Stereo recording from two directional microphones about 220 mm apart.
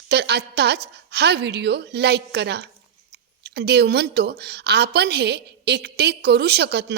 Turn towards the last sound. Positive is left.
turn(degrees=-50)  # may be behind; listen again after turning